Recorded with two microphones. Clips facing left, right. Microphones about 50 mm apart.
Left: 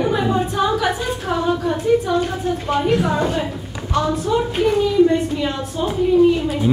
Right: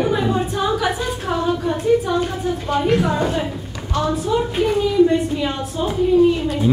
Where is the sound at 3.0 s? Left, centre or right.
Centre.